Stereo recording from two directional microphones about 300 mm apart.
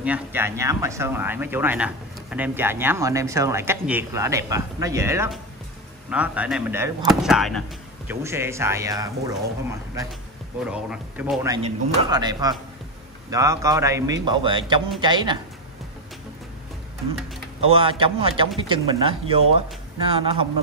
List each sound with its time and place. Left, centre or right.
0.0 s speech: centre
10.7 s speech: centre
17.6 s speech: centre